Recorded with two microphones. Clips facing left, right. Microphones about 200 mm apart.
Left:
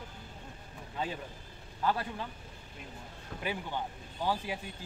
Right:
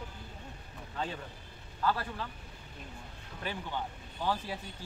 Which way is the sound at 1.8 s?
20° left (ahead or behind).